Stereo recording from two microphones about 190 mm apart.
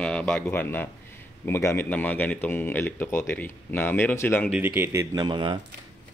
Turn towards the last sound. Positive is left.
turn(degrees=-25)  # may be behind; listen again after turning